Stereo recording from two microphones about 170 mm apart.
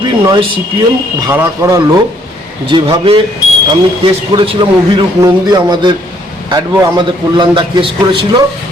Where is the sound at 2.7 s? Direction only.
30° right (ahead or behind).